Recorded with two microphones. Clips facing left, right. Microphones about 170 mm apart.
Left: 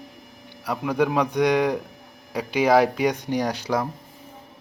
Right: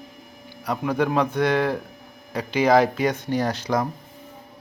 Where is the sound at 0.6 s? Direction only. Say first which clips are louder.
Even; 5° left (ahead or behind).